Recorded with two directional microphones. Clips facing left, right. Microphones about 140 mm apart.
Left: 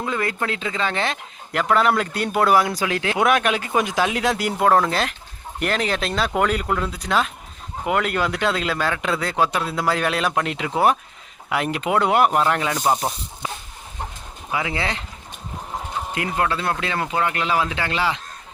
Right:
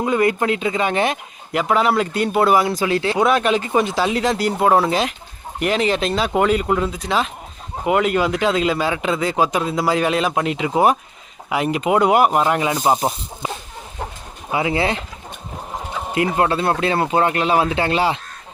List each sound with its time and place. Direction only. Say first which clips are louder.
0.0 s a man's voice: right 7 dB; 20° right (ahead or behind); by 4.5 s 5° left (ahead or behind)
4.6 s a man's voice: right 1 dB; 10° right (ahead or behind)
14.5 s speech: right 6 dB; 25° right (ahead or behind)
16.1 s speech: right 6 dB; 25° right (ahead or behind)